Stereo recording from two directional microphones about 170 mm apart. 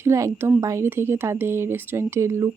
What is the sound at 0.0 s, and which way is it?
A woman's voice, 15° right (ahead or behind).